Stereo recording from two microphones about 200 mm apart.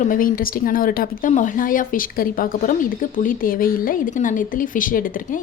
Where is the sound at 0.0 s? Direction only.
40° left (ahead or behind).